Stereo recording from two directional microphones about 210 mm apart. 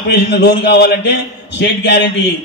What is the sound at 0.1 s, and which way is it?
A man's voice, 55° left (ahead or behind).